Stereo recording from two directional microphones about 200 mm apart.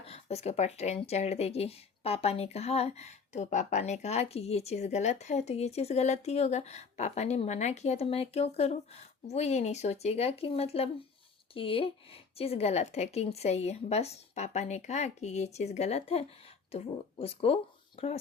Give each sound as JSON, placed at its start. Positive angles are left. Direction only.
{"t": 0.0, "sound": "speech", "side_deg": 30}